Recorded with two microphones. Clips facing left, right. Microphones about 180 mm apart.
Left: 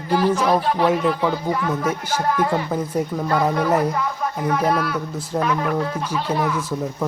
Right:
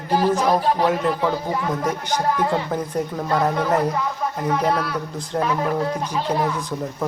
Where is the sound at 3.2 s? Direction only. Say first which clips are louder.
Even; 5° right (ahead or behind).